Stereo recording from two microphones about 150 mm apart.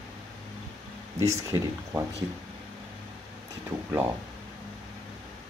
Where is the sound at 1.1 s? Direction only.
20° right (ahead or behind).